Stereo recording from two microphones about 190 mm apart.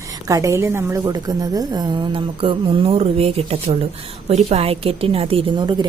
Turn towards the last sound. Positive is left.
turn(degrees=-25)  # may be behind; listen again after turning